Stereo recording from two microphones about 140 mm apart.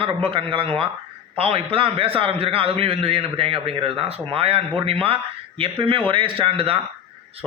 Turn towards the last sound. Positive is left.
turn(degrees=-40)  # may be behind; listen again after turning